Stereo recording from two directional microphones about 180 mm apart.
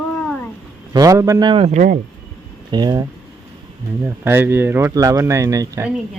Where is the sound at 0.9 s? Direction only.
20° right (ahead or behind).